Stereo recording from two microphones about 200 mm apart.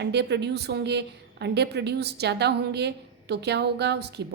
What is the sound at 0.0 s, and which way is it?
A woman's voice, 60° right (ahead or behind).